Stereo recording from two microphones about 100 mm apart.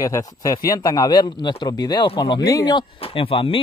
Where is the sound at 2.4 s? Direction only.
35° left (ahead or behind).